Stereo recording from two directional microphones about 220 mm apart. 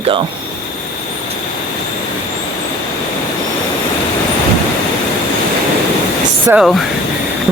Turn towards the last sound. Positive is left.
turn(degrees=0)  # may be behind; listen again after turning